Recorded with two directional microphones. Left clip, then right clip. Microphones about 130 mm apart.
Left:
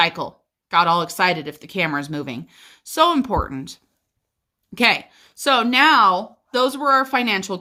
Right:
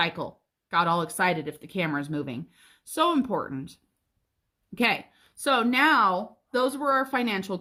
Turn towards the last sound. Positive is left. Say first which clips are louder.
# left 7 dB
turn(degrees=15)  # may be behind; listen again after turning